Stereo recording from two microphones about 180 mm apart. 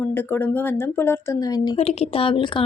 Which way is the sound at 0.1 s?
10° left (ahead or behind).